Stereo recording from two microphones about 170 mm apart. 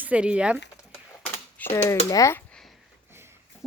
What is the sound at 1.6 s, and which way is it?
Typewriter, 10° left (ahead or behind).